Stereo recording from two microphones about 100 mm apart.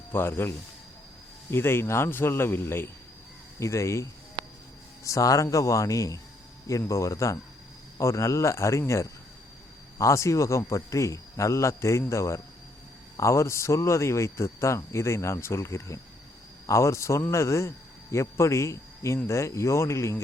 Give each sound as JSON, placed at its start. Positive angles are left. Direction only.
{"t": 0.1, "sound": "a man's voice", "side_deg": 25}